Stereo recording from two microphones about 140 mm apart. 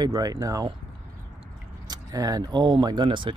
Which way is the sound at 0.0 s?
25° right (ahead or behind).